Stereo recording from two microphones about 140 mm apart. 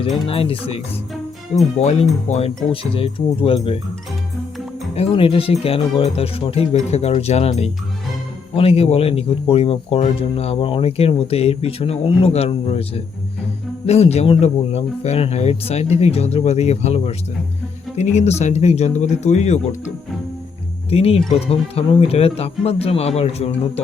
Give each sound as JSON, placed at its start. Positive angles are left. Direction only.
{"t": 0.3, "sound": "speech", "side_deg": 40}
{"t": 1.8, "sound": "speech", "side_deg": 50}
{"t": 2.9, "sound": "speech", "side_deg": 40}
{"t": 4.9, "sound": "speech", "side_deg": 40}
{"t": 20.9, "sound": "speech", "side_deg": 45}